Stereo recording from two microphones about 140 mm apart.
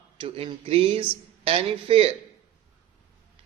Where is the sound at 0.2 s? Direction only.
40° right (ahead or behind).